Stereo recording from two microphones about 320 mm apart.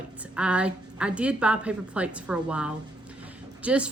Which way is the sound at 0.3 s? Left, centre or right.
Centre.